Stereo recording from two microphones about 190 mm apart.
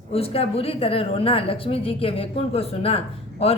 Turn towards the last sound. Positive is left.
turn(degrees=30)  # may be behind; listen again after turning